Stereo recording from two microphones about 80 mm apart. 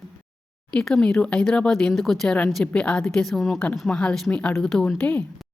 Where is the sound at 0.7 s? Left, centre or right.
Centre.